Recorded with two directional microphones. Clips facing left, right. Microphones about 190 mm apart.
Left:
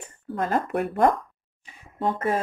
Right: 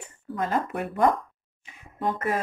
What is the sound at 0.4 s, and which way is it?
Speech, 55° left (ahead or behind).